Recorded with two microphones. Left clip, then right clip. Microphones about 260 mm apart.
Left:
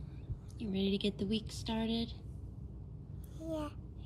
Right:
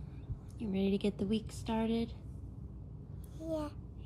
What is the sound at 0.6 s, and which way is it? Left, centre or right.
Speech, right.